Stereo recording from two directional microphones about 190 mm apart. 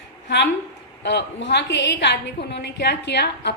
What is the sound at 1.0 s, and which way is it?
A woman's voice, 65° left (ahead or behind).